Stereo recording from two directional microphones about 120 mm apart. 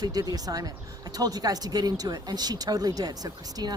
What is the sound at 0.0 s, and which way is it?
Speech, 30° right (ahead or behind).